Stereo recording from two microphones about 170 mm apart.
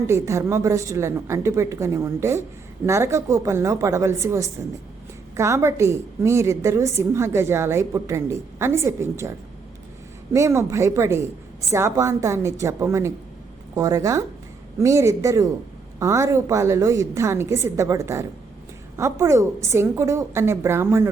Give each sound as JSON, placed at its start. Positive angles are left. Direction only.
{"t": 0.1, "sound": "a woman's voice", "side_deg": -15}
{"t": 10.3, "sound": "a woman's voice", "side_deg": -15}